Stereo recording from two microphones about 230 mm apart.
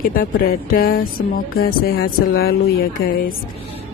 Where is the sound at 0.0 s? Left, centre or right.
Left.